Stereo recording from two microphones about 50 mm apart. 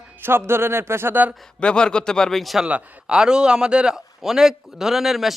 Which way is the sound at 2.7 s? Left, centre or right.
Right.